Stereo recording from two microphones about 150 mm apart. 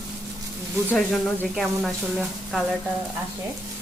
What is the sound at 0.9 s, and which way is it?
Speech, 5° left (ahead or behind).